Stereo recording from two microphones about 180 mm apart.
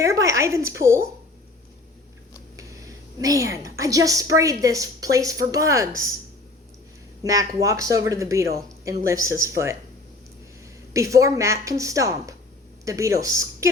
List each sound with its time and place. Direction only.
0.0 s a woman's voice: 15° right (ahead or behind)
2.6 s a woman's voice: 20° right (ahead or behind)
7.2 s speech: 20° right (ahead or behind)
10.9 s speech: 15° right (ahead or behind)